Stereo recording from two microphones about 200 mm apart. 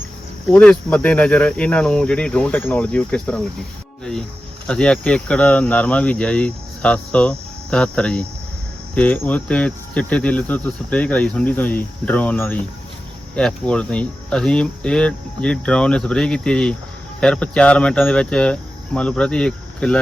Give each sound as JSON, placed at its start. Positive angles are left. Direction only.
{"t": 0.4, "sound": "speech", "side_deg": 5}
{"t": 4.6, "sound": "speech", "side_deg": 5}
{"t": 9.0, "sound": "cricket", "side_deg": 10}
{"t": 13.3, "sound": "speech", "side_deg": 5}